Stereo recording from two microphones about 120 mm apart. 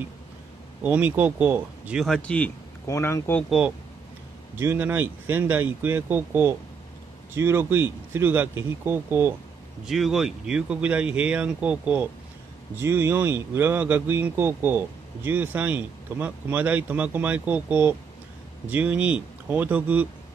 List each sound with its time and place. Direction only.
0.8 s speech: 15° right (ahead or behind)
2.0 s speech: 5° left (ahead or behind)
2.9 s speech: 25° left (ahead or behind)
3.4 s speech: 10° right (ahead or behind)
4.6 s speech: 20° right (ahead or behind)
9.8 s speech: centre (ahead or behind)